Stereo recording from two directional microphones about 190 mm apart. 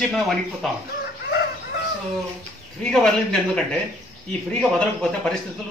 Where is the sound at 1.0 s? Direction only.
55° left (ahead or behind).